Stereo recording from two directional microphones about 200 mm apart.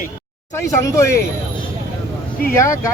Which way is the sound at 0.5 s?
15° left (ahead or behind).